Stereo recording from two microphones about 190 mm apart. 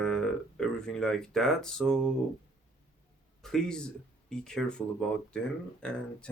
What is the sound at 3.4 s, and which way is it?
Speech, 5° left (ahead or behind).